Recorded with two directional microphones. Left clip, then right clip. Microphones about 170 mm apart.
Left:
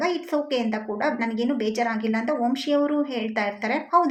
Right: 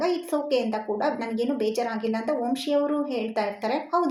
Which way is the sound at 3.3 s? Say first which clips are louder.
Left 2 dB; 35° right (ahead or behind).